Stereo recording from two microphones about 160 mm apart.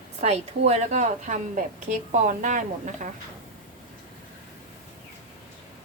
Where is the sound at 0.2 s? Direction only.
40° right (ahead or behind).